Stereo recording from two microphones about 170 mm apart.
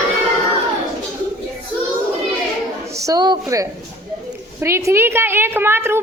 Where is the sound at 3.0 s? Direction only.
20° right (ahead or behind).